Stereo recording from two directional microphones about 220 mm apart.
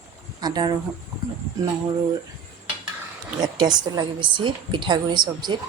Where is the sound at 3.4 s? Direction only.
20° right (ahead or behind).